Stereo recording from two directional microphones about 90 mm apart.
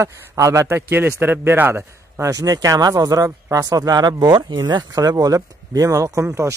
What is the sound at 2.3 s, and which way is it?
Speech, 40° right (ahead or behind).